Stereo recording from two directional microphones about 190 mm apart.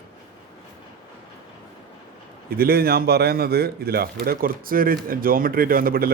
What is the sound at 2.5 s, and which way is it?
A man's voice, 50° right (ahead or behind).